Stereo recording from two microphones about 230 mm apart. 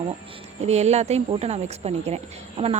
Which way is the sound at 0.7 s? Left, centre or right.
Right.